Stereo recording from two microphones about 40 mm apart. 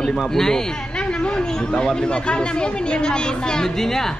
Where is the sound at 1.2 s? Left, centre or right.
Left.